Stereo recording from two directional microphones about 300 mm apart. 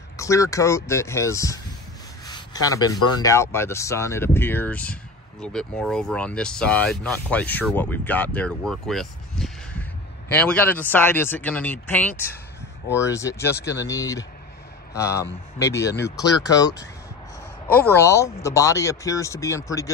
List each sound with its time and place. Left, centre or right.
0.2 s speech: centre